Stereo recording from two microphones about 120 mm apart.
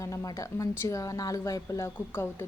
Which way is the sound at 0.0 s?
25° left (ahead or behind).